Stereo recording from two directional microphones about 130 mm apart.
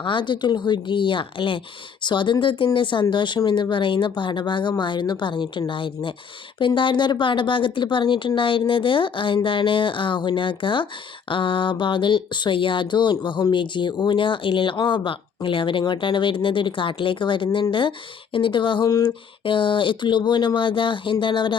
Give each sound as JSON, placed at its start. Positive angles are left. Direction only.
{"t": 0.0, "sound": "speech", "side_deg": 40}